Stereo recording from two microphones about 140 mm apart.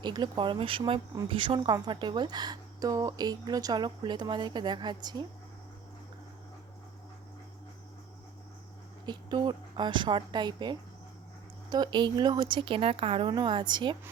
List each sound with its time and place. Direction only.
0.0 s speech: 30° right (ahead or behind)
9.0 s speech: 30° right (ahead or behind)